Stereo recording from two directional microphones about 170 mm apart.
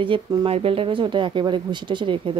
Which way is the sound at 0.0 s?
25° right (ahead or behind).